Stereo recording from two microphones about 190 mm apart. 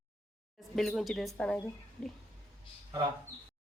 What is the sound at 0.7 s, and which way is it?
Speech, centre (ahead or behind).